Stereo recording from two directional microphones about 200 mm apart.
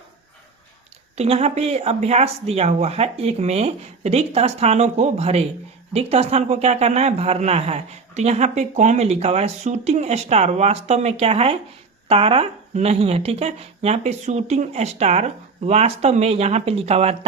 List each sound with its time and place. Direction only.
1.1 s speech: 30° right (ahead or behind)